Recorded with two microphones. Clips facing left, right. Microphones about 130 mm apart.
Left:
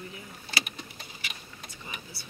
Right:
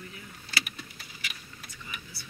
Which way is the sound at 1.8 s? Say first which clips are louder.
Left 2 dB; 30° left (ahead or behind).